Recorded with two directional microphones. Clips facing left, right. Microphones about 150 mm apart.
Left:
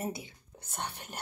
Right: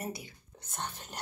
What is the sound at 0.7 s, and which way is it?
Speech, 15° left (ahead or behind).